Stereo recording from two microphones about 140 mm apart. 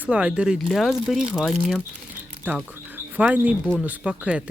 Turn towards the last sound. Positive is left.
turn(degrees=-10)  # may be behind; listen again after turning